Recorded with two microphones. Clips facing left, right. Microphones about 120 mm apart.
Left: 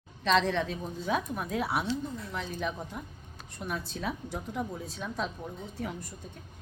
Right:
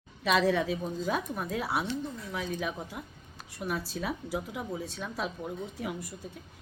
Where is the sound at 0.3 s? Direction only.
5° right (ahead or behind).